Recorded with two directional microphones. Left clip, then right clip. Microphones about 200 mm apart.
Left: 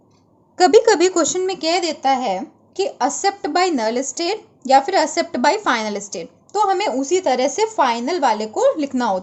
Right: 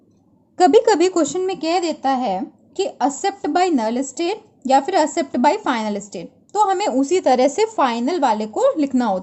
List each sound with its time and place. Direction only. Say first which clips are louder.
0.5 s speech: left 1 dB; 15° right (ahead or behind); by 9.2 s 30° right (ahead or behind)